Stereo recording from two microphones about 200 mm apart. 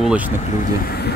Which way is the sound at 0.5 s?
45° left (ahead or behind).